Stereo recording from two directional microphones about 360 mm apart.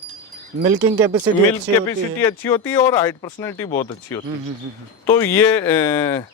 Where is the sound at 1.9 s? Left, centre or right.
Centre.